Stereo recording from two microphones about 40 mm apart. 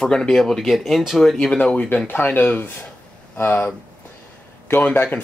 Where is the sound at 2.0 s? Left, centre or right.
Left.